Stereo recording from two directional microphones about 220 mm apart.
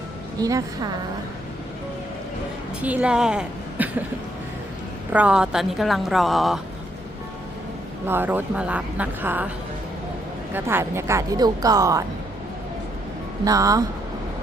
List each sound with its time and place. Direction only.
0.3 s speech: 15° right (ahead or behind)
2.8 s a woman's voice: 5° right (ahead or behind)
5.1 s a woman's voice: 5° right (ahead or behind)
8.0 s speech: 10° right (ahead or behind)
10.5 s speech: 10° right (ahead or behind)
13.4 s speech: 15° right (ahead or behind)